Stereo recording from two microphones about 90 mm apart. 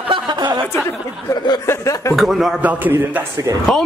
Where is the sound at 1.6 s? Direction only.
30° left (ahead or behind).